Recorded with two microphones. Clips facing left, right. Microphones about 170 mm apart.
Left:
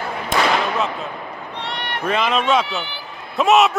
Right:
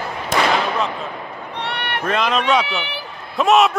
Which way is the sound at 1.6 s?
65° right (ahead or behind).